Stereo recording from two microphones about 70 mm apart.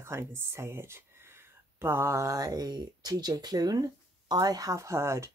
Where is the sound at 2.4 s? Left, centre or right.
Right.